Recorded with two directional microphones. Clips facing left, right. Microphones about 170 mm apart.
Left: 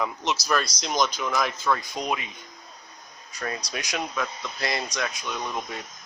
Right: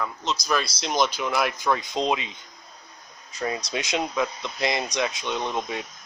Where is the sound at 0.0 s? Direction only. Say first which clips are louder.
Left 1 dB; 10° left (ahead or behind).